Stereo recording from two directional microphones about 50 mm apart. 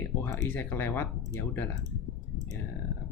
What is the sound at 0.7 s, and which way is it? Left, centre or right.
Speech, left.